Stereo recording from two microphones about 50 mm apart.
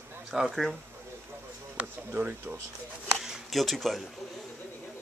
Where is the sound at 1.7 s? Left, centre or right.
Right.